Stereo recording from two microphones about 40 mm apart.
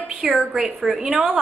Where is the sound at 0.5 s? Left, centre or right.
Centre.